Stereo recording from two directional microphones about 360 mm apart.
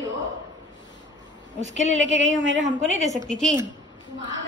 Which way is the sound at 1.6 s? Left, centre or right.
Right.